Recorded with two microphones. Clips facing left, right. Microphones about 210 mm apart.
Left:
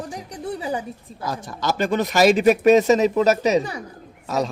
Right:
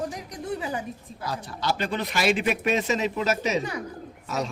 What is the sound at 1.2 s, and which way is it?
A man's voice, 45° left (ahead or behind).